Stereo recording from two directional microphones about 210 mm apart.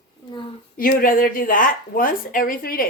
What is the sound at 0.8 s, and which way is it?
Speech, 40° left (ahead or behind).